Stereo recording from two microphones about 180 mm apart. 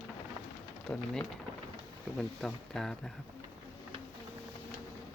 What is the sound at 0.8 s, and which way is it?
Speech, 5° left (ahead or behind).